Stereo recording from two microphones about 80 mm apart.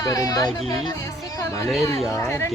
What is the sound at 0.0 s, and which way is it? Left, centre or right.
Speech, left.